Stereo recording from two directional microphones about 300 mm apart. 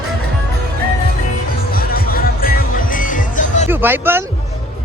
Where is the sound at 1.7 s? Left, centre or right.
Left.